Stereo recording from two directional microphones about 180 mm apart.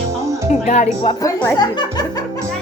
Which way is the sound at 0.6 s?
40° left (ahead or behind).